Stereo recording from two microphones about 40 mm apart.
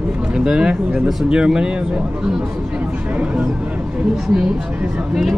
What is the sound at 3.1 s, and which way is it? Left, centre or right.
Speech, right.